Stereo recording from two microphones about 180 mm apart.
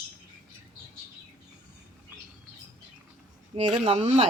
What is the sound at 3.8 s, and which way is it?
Speech, 35° right (ahead or behind).